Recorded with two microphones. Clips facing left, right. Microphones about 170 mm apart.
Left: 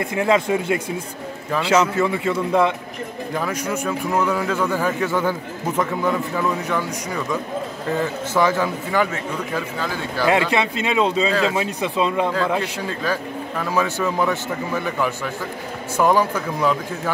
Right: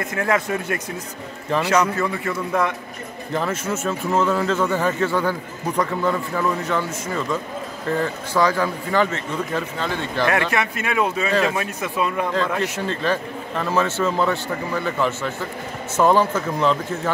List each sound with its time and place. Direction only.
0.0 s a man's voice: 15° left (ahead or behind)
1.5 s a man's voice: 10° left (ahead or behind)
3.8 s a man's voice: 15° left (ahead or behind)
4.3 s a man's voice: centre (ahead or behind); by 6.1 s 20° left (ahead or behind)
6.3 s speech: centre (ahead or behind)
8.0 s speech: 20° left (ahead or behind)
8.5 s speech: 10° left (ahead or behind)
10.3 s a man's voice: 15° left (ahead or behind)